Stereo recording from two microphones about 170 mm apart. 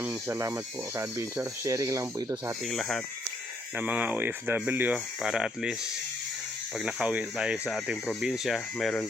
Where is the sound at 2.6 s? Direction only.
Centre (ahead or behind).